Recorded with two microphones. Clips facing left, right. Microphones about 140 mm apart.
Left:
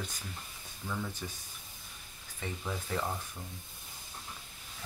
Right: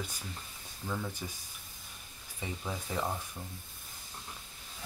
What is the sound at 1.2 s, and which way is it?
Speech, 15° right (ahead or behind).